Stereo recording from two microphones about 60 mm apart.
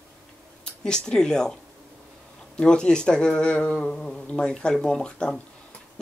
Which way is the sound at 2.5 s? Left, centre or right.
Centre.